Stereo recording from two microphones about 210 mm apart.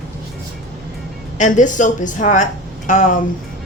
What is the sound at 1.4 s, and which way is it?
A woman's voice, 35° left (ahead or behind).